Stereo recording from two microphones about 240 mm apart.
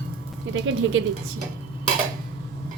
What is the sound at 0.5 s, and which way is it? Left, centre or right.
Speech, right.